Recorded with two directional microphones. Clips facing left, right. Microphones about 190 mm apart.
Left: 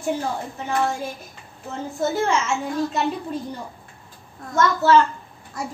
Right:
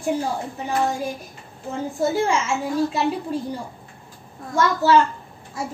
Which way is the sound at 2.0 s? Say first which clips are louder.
Right 1 dB; 10° right (ahead or behind).